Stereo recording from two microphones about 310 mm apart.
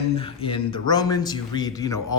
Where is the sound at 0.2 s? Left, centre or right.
Centre.